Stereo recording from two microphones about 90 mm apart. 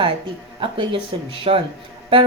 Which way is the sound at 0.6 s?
70° right (ahead or behind).